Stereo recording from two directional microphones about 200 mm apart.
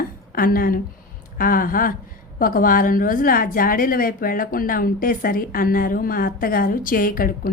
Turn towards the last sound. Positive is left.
turn(degrees=45)  # may be behind; listen again after turning